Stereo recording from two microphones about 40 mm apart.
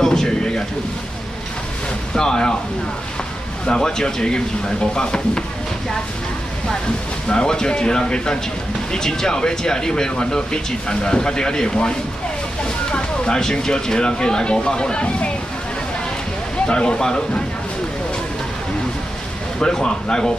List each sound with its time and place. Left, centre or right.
0.0 s a sound: centre
2.1 s speech: centre
3.6 s speech: centre
7.2 s speech: centre
12.9 s a sound: left
13.4 s speech: centre
16.6 s speech: left
19.6 s speech: centre